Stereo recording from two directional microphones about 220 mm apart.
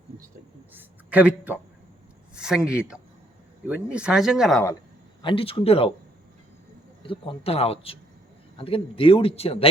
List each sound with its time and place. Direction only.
0.7 s a sound: 5° right (ahead or behind)
2.6 s speech: 5° right (ahead or behind)
5.2 s a man's voice: 25° left (ahead or behind)
7.1 s a man's voice: 25° left (ahead or behind)